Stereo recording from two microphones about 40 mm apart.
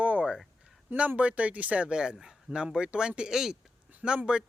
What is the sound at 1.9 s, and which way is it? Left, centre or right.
Speech, right.